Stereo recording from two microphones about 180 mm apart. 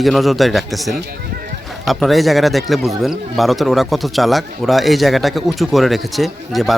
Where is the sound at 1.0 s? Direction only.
60° right (ahead or behind).